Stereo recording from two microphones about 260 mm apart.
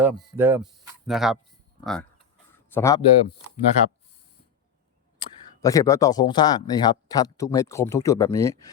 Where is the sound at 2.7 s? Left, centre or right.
Centre.